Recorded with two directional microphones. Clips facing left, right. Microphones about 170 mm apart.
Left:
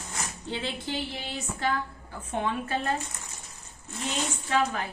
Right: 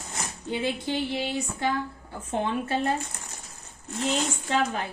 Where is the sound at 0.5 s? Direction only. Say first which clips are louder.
Right 5 dB; 15° right (ahead or behind).